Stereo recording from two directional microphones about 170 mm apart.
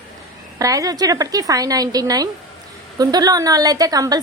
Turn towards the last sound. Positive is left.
turn(degrees=-20)  # may be behind; listen again after turning